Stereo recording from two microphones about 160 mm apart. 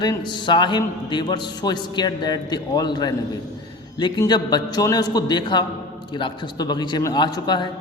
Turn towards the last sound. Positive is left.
turn(degrees=25)  # may be behind; listen again after turning